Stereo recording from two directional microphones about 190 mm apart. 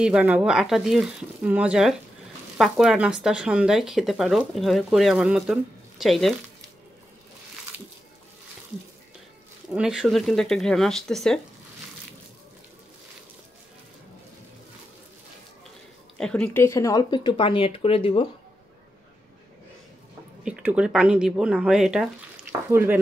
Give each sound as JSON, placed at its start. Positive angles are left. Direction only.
{"t": 0.0, "sound": "speech", "side_deg": -5}
{"t": 9.8, "sound": "speech", "side_deg": -5}
{"t": 16.2, "sound": "speech", "side_deg": 5}
{"t": 20.4, "sound": "speech", "side_deg": -5}